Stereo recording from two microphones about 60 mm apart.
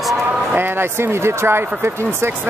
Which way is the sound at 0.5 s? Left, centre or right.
Right.